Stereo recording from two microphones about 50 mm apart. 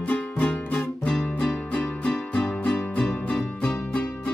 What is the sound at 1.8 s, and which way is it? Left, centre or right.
Music, left.